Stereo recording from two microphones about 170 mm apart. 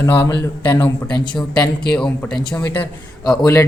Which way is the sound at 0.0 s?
15° left (ahead or behind).